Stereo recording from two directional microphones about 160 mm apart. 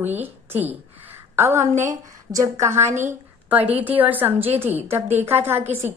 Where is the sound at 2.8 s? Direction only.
50° right (ahead or behind).